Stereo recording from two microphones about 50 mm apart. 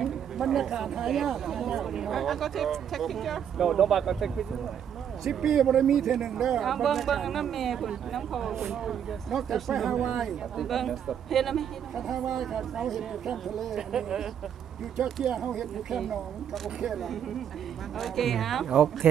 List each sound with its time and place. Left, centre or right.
0.0 s speech: centre
6.6 s speech: centre
9.9 s speech: centre
10.2 s speech: centre
13.7 s speech: centre